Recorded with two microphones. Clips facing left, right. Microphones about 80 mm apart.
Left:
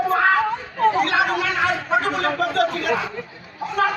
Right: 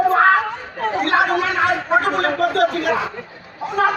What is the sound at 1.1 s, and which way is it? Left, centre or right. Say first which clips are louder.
A man's voice: right 3 dB; right.